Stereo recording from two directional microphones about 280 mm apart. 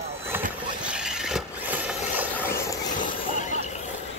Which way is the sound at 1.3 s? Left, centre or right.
Centre.